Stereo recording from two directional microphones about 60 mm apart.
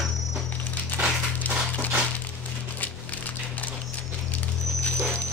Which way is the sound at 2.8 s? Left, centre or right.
Left.